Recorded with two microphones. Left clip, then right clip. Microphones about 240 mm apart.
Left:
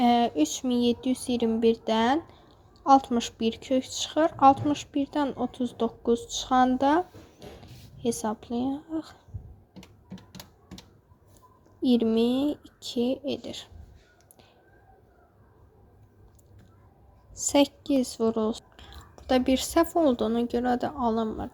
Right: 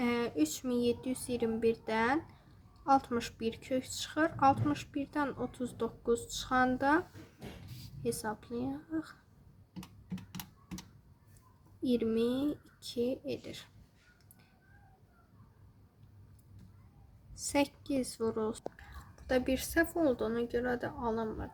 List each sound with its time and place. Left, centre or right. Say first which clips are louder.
0.0 s speech: left 10 dB; centre
8.0 s speech: left 7 dB; centre
11.8 s speech: left 7 dB; centre
17.4 s speech: left 9 dB; centre